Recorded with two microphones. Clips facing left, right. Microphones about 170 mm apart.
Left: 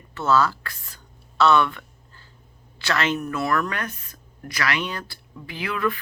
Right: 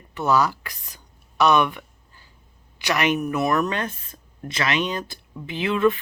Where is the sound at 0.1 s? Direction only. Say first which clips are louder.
Even; 15° right (ahead or behind).